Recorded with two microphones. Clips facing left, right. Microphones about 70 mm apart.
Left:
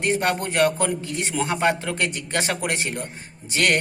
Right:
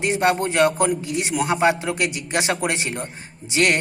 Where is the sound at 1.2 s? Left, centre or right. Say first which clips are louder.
Right 3 dB; centre.